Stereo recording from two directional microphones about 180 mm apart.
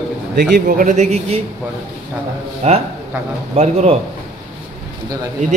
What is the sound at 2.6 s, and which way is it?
A man's voice, 35° right (ahead or behind).